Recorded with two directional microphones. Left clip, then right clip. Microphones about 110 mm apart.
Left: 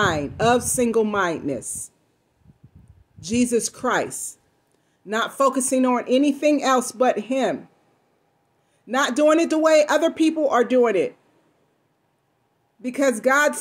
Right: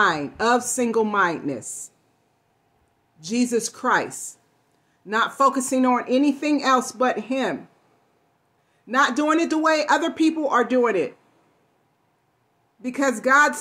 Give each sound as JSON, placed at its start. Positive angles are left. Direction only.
{"t": 0.0, "sound": "speech", "side_deg": 20}
{"t": 3.2, "sound": "speech", "side_deg": 20}
{"t": 8.8, "sound": "speech", "side_deg": 20}
{"t": 12.8, "sound": "speech", "side_deg": 15}